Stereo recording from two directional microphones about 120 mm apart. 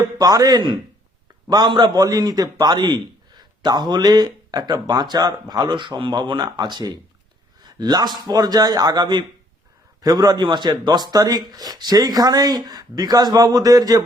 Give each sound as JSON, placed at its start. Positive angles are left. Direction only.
{"t": 0.0, "sound": "a man's voice", "side_deg": -30}